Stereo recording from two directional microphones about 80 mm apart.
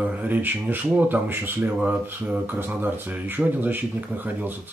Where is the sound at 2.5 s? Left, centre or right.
Right.